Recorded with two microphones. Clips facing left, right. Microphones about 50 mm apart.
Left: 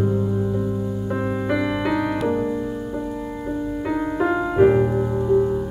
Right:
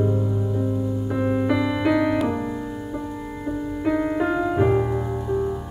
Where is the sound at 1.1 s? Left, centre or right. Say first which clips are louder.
Right 3 dB; centre.